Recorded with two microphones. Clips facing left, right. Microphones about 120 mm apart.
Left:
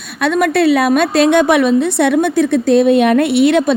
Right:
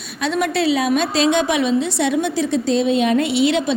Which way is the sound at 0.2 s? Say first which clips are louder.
Left 6 dB; 55° left (ahead or behind).